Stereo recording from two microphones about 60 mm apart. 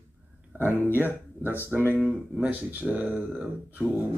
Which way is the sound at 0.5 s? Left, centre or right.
Right.